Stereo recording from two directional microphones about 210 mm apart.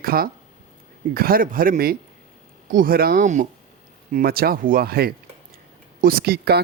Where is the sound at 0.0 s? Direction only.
45° right (ahead or behind).